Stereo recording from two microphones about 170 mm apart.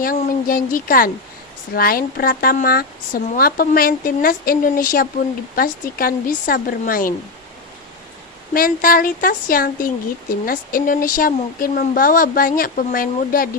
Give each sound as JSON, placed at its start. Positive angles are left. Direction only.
{"t": 0.0, "sound": "speech", "side_deg": 55}
{"t": 8.5, "sound": "speech", "side_deg": 55}